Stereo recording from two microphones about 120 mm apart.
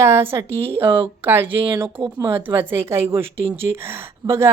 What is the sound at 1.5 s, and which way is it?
Speech, 45° right (ahead or behind).